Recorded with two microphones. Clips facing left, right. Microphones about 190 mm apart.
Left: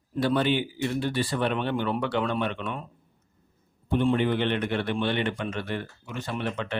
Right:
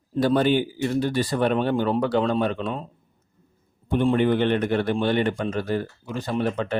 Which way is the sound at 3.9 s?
50° right (ahead or behind).